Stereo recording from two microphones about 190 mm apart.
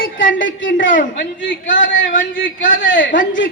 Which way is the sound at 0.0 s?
45° left (ahead or behind).